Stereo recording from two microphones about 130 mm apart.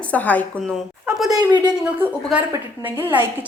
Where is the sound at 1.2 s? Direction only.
30° right (ahead or behind).